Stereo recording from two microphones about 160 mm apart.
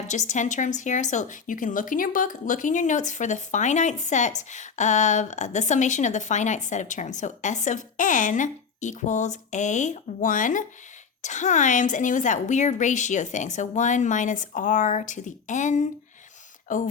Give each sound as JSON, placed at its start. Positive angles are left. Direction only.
{"t": 0.1, "sound": "a woman's voice", "side_deg": 50}